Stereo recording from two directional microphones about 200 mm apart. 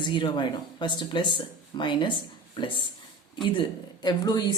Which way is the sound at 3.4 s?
25° left (ahead or behind).